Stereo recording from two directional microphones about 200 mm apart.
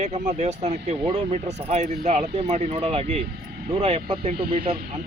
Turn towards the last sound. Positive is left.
turn(degrees=-30)  # may be behind; listen again after turning